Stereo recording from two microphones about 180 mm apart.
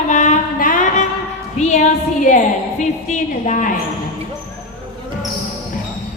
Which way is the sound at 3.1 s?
45° left (ahead or behind).